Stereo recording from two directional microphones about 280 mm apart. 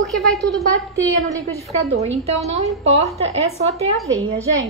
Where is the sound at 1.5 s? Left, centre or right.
Right.